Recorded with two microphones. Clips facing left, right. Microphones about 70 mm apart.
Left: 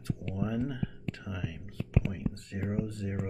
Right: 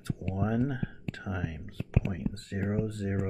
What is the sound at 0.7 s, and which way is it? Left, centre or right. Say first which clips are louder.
Speech: right 1 dB; right.